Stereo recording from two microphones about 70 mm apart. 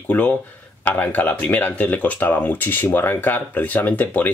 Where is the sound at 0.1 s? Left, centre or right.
Left.